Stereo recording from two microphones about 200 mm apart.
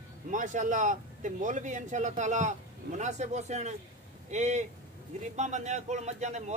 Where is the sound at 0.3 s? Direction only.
40° right (ahead or behind).